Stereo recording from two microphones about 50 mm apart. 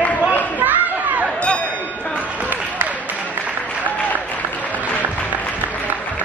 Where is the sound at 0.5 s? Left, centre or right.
Right.